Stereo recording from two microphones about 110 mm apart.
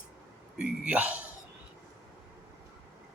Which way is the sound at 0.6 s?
10° right (ahead or behind).